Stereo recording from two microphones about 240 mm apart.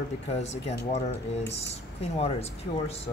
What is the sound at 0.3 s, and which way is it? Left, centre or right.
Speech, left.